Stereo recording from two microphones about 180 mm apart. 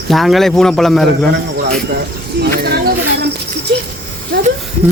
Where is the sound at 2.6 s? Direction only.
60° right (ahead or behind).